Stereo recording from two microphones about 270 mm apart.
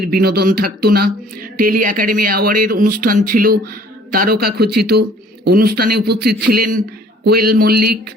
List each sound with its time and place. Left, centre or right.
0.0 s speech: right